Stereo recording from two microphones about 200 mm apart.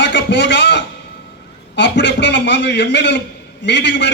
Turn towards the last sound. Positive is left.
turn(degrees=60)  # may be behind; listen again after turning